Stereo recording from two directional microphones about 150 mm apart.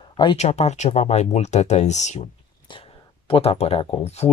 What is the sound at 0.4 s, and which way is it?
Speech, 45° left (ahead or behind).